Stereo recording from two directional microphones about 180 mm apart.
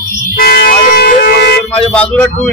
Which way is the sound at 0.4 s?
55° left (ahead or behind).